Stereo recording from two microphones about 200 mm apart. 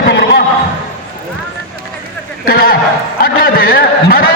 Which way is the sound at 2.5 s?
50° left (ahead or behind).